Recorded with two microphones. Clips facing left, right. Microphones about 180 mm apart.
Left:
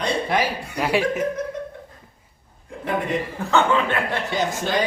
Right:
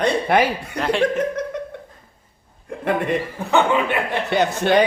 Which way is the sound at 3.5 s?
15° right (ahead or behind).